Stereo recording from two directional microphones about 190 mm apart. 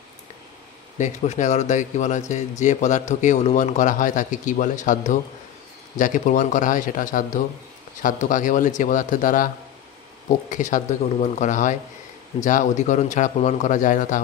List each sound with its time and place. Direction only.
0.9 s speech: 40° left (ahead or behind)